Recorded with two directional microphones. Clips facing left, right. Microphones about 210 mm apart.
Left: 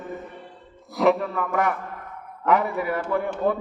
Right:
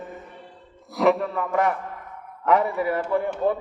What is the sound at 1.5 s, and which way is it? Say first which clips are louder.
A man's voice: right 3 dB; 30° right (ahead or behind).